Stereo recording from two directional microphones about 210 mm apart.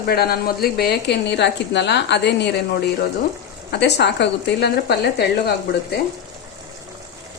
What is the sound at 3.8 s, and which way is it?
A woman's voice, 55° left (ahead or behind).